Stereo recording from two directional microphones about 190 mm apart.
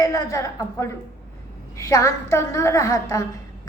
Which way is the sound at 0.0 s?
15° left (ahead or behind).